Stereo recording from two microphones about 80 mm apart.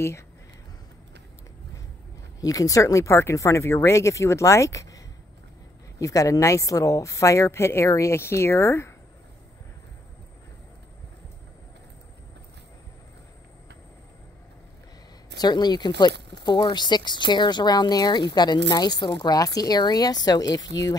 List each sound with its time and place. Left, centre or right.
2.4 s a woman's voice: left
15.3 s speech: left